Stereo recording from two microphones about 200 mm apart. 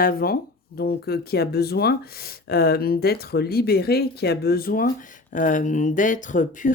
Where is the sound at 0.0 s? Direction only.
50° left (ahead or behind).